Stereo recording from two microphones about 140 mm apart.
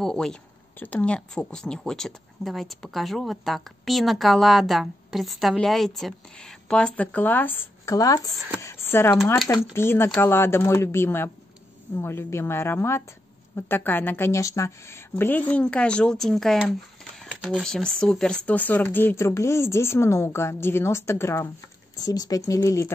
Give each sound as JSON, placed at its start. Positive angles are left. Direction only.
{"t": 0.0, "sound": "speech", "side_deg": 5}
{"t": 7.9, "sound": "speech", "side_deg": 25}